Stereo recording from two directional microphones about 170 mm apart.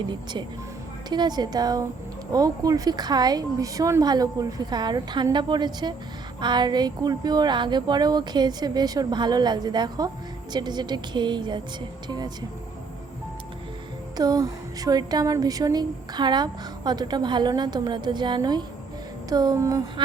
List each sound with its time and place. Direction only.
1.1 s speech: 25° right (ahead or behind)
14.2 s speech: 20° right (ahead or behind)